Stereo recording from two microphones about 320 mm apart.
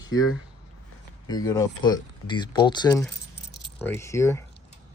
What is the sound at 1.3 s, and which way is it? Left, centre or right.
Speech, centre.